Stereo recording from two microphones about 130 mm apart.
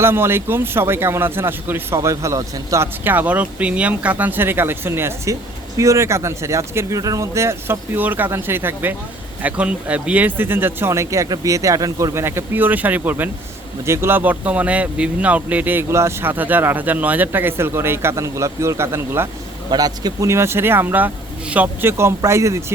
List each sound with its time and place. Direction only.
0.0 s a man's voice: 20° right (ahead or behind)
19.7 s speech: 30° right (ahead or behind)